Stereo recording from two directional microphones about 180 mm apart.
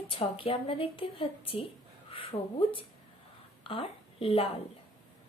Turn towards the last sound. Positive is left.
turn(degrees=30)  # may be behind; listen again after turning